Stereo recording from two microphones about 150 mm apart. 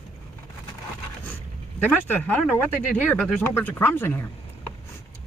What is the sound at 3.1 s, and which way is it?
Speech, centre (ahead or behind).